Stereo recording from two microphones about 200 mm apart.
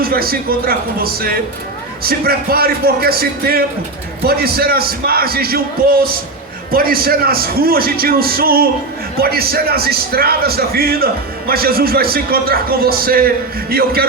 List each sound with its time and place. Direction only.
0.0 s speech: 50° right (ahead or behind)